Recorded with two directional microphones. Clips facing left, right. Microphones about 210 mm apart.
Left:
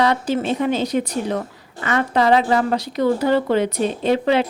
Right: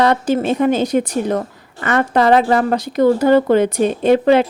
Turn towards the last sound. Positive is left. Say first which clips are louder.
# right 5 dB
turn(degrees=-50)  # may be behind; listen again after turning